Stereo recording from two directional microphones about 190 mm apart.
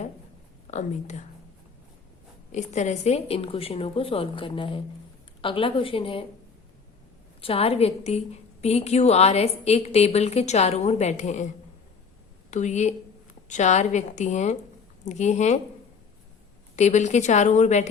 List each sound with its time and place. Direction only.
0.7 s a woman's voice: 40° left (ahead or behind)
2.5 s a woman's voice: 40° left (ahead or behind)
7.4 s a woman's voice: 30° left (ahead or behind)
12.5 s a woman's voice: 40° left (ahead or behind)
16.7 s a woman's voice: 40° left (ahead or behind)